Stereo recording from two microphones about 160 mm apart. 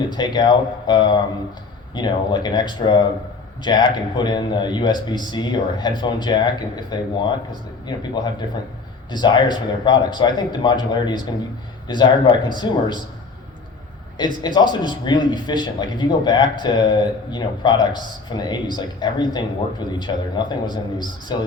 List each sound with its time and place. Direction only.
0.1 s speech: 25° left (ahead or behind)
14.4 s speech: 25° left (ahead or behind)